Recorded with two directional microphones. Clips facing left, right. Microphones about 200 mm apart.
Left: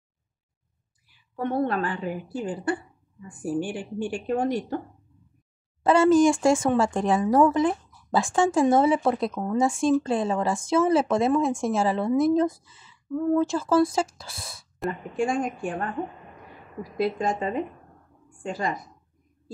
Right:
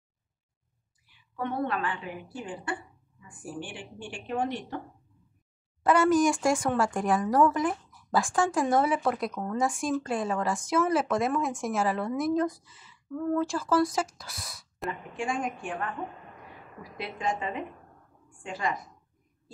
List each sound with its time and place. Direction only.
1.3 s a woman's voice: 40° left (ahead or behind)
5.9 s speech: 25° left (ahead or behind)
14.9 s a woman's voice: 40° left (ahead or behind)
16.9 s a woman's voice: 40° left (ahead or behind)